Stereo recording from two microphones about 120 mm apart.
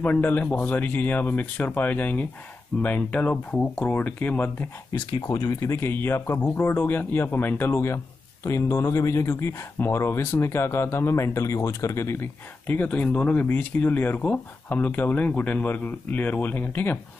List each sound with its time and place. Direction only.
0.0 s speech: 15° left (ahead or behind)
5.2 s speech: 30° left (ahead or behind)